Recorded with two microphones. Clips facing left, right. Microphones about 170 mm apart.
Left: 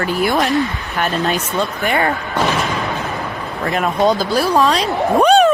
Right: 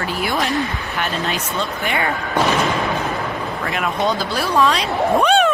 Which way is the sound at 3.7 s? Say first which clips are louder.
Left 6 dB; 40° left (ahead or behind).